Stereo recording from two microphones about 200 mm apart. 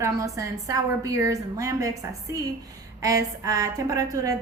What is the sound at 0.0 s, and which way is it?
A woman's voice, 15° right (ahead or behind).